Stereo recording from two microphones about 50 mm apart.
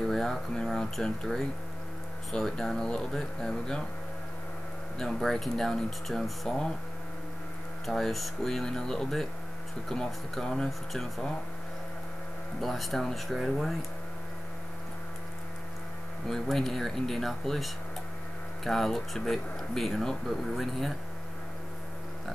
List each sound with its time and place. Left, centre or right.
0.0 s speech: centre
4.9 s speech: centre
7.8 s speech: centre
12.5 s speech: centre
16.3 s speech: centre